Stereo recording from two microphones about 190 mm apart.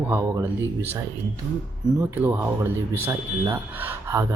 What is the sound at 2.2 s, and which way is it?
Speech, 10° right (ahead or behind).